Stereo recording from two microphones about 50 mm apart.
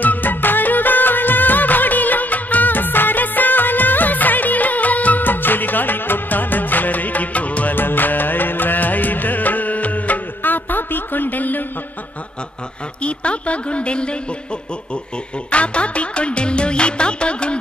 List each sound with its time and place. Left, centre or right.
0.0 s music: left
7.7 s music: left
13.0 s a sound: left
15.5 s music: left